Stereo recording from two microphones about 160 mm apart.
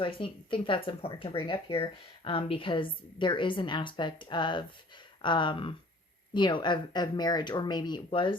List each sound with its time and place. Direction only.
0.0 s speech: 30° left (ahead or behind)